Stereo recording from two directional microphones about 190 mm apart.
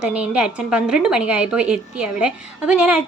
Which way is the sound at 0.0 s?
5° right (ahead or behind).